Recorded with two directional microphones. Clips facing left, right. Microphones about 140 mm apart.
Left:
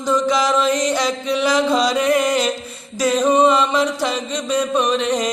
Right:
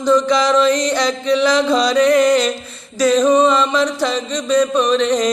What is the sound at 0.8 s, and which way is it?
Music, 10° left (ahead or behind).